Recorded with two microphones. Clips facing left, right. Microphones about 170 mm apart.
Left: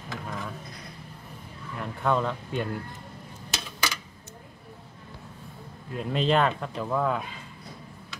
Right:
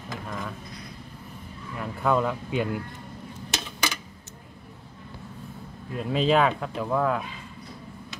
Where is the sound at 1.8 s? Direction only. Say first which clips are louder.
Right 2 dB; 5° right (ahead or behind).